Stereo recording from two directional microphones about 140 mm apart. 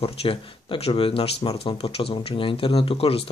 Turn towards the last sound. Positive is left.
turn(degrees=45)  # may be behind; listen again after turning